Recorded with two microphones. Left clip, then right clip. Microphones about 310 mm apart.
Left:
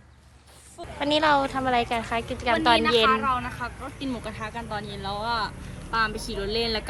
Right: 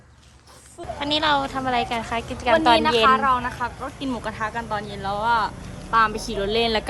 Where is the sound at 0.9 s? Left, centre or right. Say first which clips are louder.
Even; centre.